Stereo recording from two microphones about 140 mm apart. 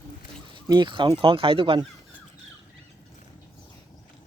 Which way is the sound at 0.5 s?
35° right (ahead or behind).